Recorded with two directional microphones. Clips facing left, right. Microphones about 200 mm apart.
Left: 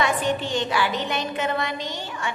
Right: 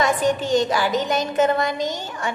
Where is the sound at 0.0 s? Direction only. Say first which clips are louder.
Right 3 dB; 40° right (ahead or behind).